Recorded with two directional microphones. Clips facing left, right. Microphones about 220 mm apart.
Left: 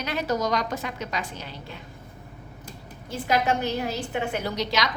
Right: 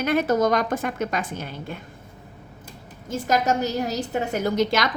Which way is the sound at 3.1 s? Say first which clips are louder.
Right 2 dB; 45° right (ahead or behind).